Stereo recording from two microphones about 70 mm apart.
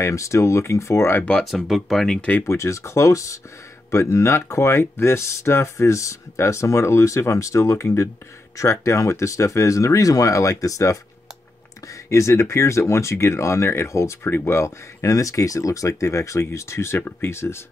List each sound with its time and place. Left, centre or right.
0.0 s speech: left
1.7 s speech: centre
2.4 s speech: left
14.2 s speech: left